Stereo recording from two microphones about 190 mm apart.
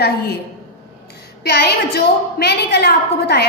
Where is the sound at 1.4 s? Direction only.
60° left (ahead or behind).